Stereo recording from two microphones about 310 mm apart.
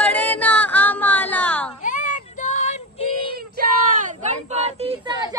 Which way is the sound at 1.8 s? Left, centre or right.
Left.